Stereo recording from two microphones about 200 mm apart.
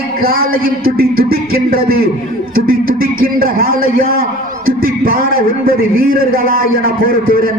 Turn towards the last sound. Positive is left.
turn(degrees=-45)  # may be behind; listen again after turning